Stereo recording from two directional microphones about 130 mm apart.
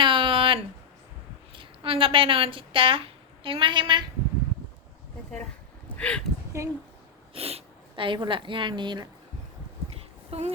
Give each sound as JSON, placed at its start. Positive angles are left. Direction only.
{"t": 0.0, "sound": "a sound", "side_deg": -40}
{"t": 1.5, "sound": "a woman's voice", "side_deg": -45}
{"t": 6.0, "sound": "speech", "side_deg": 10}
{"t": 6.5, "sound": "a woman's voice", "side_deg": -20}
{"t": 7.3, "sound": "speech", "side_deg": -50}
{"t": 9.9, "sound": "a sound", "side_deg": -55}